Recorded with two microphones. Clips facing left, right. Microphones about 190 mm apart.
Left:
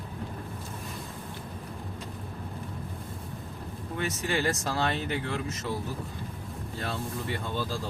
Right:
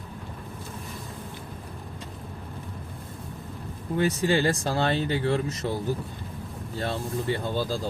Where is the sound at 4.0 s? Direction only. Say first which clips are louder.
Right 7 dB; 30° right (ahead or behind).